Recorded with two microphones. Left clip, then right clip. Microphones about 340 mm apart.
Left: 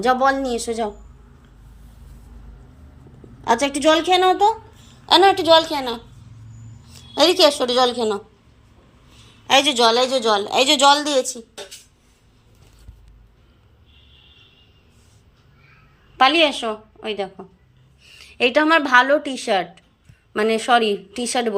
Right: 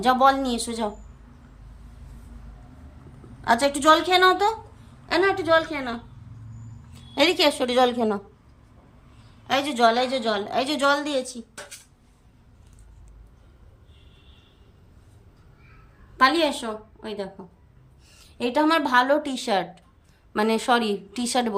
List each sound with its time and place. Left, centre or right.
0.0 s a woman's voice: centre
3.4 s a woman's voice: centre
4.3 s speech: right
5.0 s a woman's voice: centre
7.1 s a woman's voice: centre
9.5 s a woman's voice: centre
16.1 s a woman's voice: centre